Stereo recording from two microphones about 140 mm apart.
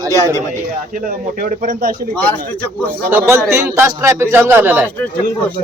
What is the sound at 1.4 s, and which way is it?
Speech, 75° right (ahead or behind).